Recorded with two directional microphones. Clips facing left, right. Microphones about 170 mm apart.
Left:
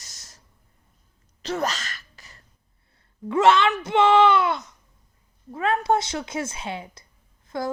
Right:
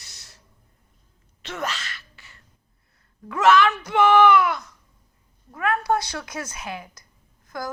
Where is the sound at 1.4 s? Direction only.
35° left (ahead or behind).